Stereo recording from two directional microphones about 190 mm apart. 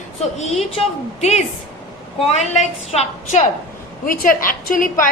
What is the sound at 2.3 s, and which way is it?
A woman's voice, 35° left (ahead or behind).